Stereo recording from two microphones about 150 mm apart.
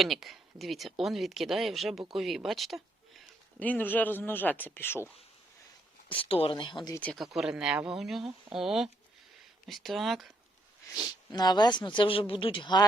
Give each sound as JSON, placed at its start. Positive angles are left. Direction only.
{"t": 0.0, "sound": "speech", "side_deg": 0}
{"t": 3.6, "sound": "speech", "side_deg": 10}
{"t": 6.1, "sound": "speech", "side_deg": 35}
{"t": 6.9, "sound": "speech", "side_deg": 10}
{"t": 7.2, "sound": "speech", "side_deg": -5}
{"t": 11.0, "sound": "speech", "side_deg": 25}